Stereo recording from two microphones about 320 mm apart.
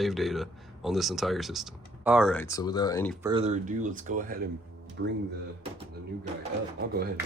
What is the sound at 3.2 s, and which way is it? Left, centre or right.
Speech, centre.